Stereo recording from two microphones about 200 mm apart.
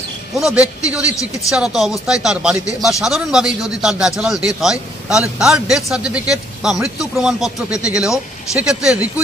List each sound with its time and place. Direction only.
0.4 s speech: centre (ahead or behind)